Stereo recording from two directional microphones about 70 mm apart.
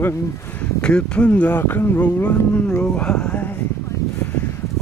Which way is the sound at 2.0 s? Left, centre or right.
Centre.